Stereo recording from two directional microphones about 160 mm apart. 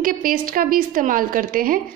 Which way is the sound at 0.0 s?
60° right (ahead or behind).